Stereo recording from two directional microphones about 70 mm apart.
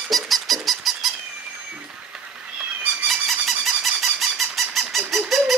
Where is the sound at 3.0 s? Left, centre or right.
Centre.